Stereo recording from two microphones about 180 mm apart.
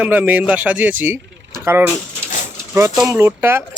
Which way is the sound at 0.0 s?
10° right (ahead or behind).